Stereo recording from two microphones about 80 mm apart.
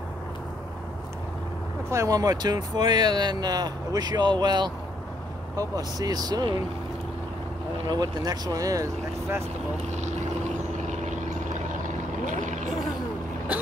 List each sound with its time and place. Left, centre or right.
1.9 s speech: right
5.6 s speech: right
7.9 s speech: right